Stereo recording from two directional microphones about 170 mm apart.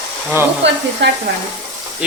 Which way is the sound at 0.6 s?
90° right.